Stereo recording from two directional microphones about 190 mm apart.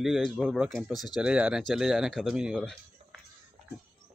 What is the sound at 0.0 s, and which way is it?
Speech, centre (ahead or behind).